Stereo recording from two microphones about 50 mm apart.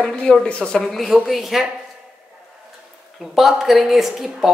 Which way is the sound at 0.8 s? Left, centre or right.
Centre.